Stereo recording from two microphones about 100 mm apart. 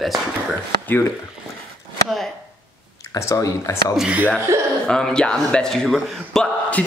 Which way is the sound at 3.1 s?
35° left (ahead or behind).